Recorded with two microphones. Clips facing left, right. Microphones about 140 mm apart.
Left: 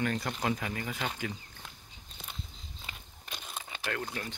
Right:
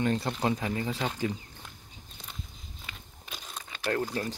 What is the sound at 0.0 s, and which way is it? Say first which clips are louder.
Speech: right 4 dB; 25° right (ahead or behind).